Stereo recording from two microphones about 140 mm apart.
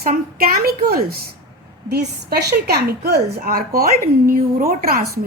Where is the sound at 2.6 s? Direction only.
90° right.